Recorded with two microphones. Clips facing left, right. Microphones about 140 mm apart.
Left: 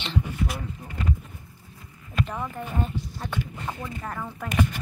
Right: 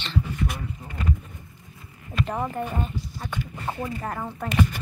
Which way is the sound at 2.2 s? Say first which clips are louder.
Right 4 dB; 35° right (ahead or behind).